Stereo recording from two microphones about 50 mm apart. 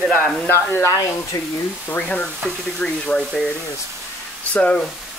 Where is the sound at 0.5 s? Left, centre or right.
Left.